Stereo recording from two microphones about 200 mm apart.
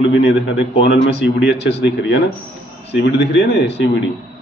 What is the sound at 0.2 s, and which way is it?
A man's voice, 55° left (ahead or behind).